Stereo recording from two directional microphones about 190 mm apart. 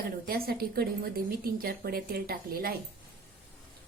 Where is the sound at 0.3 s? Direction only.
55° right (ahead or behind).